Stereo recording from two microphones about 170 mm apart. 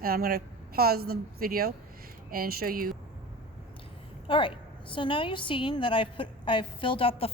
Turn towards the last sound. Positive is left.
turn(degrees=35)  # may be behind; listen again after turning